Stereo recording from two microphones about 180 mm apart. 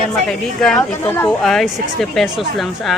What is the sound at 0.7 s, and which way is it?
Speech, 15° left (ahead or behind).